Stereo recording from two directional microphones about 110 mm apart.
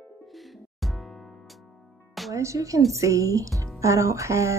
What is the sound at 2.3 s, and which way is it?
A woman's voice, 30° right (ahead or behind).